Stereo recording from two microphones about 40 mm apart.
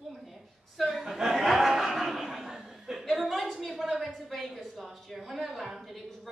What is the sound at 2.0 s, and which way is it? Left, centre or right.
Chuckle, centre.